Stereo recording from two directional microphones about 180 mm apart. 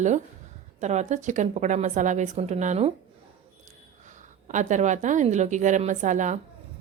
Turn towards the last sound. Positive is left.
turn(degrees=-45)  # may be behind; listen again after turning